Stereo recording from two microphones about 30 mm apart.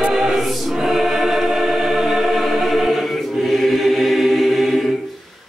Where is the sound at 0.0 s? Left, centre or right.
Centre.